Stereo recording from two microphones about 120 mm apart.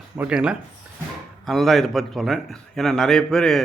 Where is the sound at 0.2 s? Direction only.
10° right (ahead or behind).